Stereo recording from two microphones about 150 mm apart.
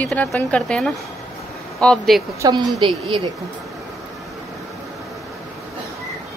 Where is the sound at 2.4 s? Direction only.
25° right (ahead or behind).